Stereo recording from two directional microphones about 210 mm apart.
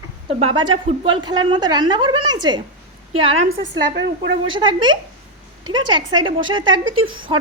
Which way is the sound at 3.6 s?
55° right (ahead or behind).